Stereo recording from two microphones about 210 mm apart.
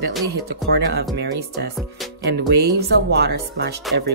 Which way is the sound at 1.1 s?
55° right (ahead or behind).